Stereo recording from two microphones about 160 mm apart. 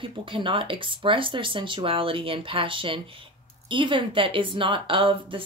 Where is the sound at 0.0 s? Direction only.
30° right (ahead or behind).